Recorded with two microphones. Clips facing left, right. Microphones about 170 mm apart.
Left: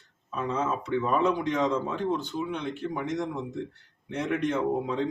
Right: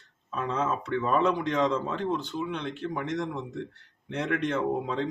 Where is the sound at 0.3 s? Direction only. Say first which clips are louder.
Even; 5° left (ahead or behind).